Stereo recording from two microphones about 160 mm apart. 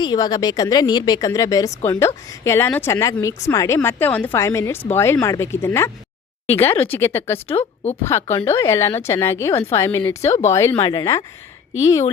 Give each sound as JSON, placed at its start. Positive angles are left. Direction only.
{"t": 0.0, "sound": "a woman's voice", "side_deg": 25}
{"t": 7.4, "sound": "a woman's voice", "side_deg": 35}
{"t": 8.0, "sound": "a woman's voice", "side_deg": 15}